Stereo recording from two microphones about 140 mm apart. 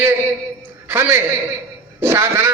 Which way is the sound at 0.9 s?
15° right (ahead or behind).